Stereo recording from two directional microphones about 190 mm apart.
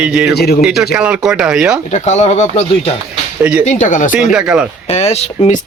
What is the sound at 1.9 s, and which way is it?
Speech, 35° left (ahead or behind).